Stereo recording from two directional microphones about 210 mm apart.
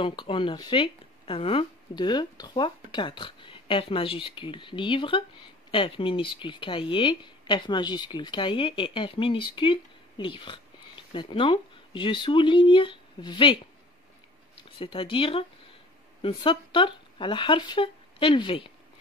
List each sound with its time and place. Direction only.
0.0 s speech: 25° left (ahead or behind)